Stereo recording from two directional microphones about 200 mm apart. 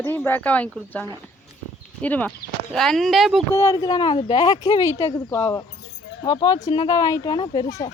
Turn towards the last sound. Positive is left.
turn(degrees=15)  # may be behind; listen again after turning